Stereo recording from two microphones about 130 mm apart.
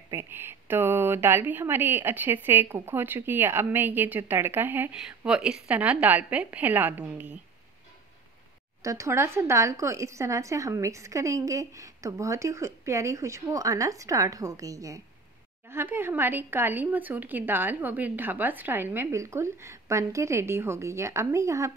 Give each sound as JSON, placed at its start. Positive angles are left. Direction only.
{"t": 0.1, "sound": "a woman's voice", "side_deg": -15}
{"t": 8.8, "sound": "a woman's voice", "side_deg": -25}